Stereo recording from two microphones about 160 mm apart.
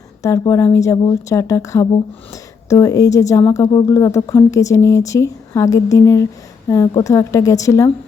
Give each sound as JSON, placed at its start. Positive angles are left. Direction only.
{"t": 0.2, "sound": "speech", "side_deg": 20}